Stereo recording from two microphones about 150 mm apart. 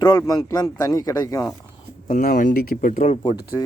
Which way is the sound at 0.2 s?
25° left (ahead or behind).